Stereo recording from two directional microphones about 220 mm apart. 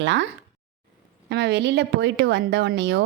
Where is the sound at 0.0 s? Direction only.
55° right (ahead or behind).